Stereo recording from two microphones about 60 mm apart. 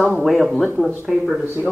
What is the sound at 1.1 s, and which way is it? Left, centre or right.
Speech, centre.